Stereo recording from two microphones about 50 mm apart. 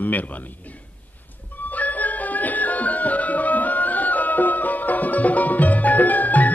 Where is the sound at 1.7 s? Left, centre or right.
Left.